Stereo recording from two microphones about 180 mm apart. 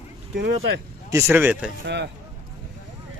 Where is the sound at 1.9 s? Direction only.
75° right (ahead or behind).